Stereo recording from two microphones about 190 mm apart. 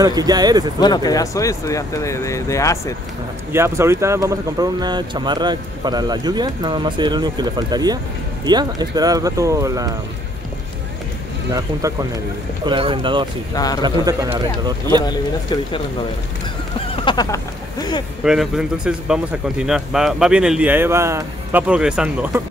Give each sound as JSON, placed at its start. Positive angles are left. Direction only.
{"t": 0.0, "sound": "speech", "side_deg": -20}
{"t": 0.7, "sound": "speech", "side_deg": 20}
{"t": 3.5, "sound": "speech", "side_deg": -15}
{"t": 12.6, "sound": "speech", "side_deg": -25}
{"t": 13.6, "sound": "speech", "side_deg": 20}
{"t": 13.8, "sound": "speech", "side_deg": -20}
{"t": 15.0, "sound": "speech", "side_deg": 25}
{"t": 16.9, "sound": "speech", "side_deg": 25}
{"t": 18.2, "sound": "speech", "side_deg": -5}